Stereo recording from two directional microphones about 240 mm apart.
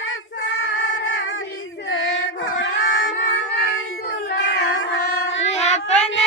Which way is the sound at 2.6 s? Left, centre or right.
Left.